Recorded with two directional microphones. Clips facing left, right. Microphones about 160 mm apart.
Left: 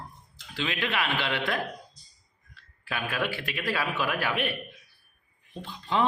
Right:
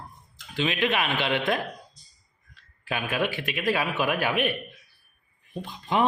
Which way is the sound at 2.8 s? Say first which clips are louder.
Right 3 dB; 20° right (ahead or behind).